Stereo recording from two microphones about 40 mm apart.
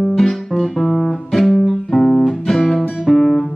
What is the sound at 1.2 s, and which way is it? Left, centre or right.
Music, centre.